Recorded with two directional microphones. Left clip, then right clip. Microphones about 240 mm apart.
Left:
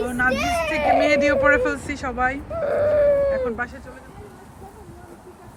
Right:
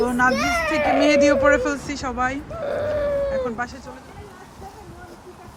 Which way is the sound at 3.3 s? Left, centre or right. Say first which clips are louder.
Left 1 dB; centre.